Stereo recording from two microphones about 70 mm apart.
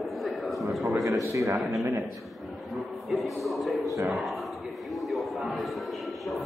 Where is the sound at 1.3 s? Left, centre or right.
Right.